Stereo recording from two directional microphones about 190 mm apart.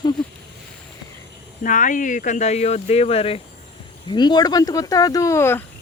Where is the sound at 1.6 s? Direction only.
45° left (ahead or behind); by 5.6 s 15° left (ahead or behind).